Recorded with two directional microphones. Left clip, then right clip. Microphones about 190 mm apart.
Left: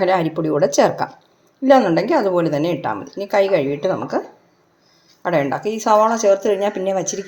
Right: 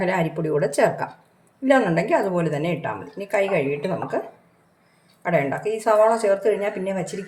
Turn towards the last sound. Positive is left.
turn(degrees=35)  # may be behind; listen again after turning